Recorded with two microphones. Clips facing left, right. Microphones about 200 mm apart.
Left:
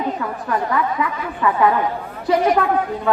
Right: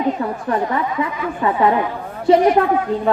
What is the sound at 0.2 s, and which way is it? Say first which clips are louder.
A woman's voice: right 3 dB; 30° right (ahead or behind).